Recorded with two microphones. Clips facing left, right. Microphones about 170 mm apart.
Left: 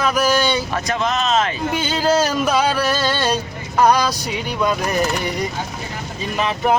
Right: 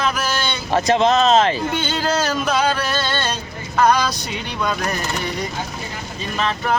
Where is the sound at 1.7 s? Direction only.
5° left (ahead or behind).